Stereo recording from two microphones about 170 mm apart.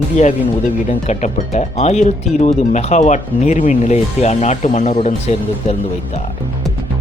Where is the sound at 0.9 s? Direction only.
45° left (ahead or behind).